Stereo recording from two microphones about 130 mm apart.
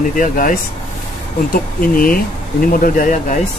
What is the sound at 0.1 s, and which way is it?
Speech, 90° left.